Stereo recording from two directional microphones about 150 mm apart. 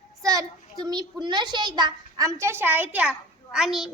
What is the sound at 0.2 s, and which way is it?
A child's voice, 25° right (ahead or behind).